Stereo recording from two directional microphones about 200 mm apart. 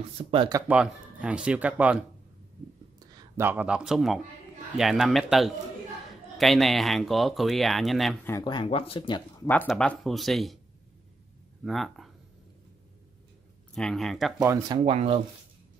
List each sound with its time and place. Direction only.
0.2 s speech: 25° right (ahead or behind)
0.7 s speech: 5° right (ahead or behind)
3.2 s speech: 10° right (ahead or behind)
8.3 s speech: 20° left (ahead or behind)
9.7 s speech: centre (ahead or behind)
11.6 s speech: centre (ahead or behind)
13.7 s speech: centre (ahead or behind)
14.5 s speech: 25° right (ahead or behind)